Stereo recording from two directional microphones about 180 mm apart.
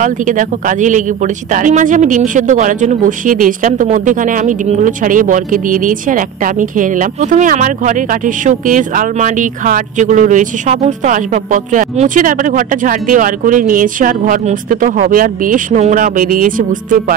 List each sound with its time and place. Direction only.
0.0 s speech: 45° right (ahead or behind)